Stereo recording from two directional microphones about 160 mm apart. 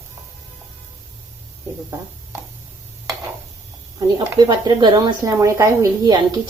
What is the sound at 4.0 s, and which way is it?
A woman's voice, 25° right (ahead or behind).